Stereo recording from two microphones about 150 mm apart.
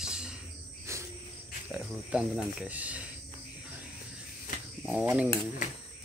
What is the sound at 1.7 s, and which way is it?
Speech, 5° right (ahead or behind).